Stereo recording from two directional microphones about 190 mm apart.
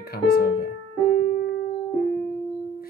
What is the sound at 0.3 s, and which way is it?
Music, 55° left (ahead or behind).